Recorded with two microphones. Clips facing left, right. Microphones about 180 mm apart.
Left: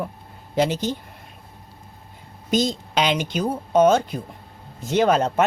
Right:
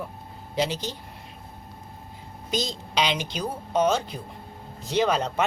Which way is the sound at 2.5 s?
50° left (ahead or behind).